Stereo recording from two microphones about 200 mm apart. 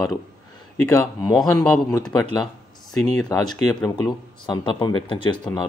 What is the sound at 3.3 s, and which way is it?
A man's voice, 15° left (ahead or behind).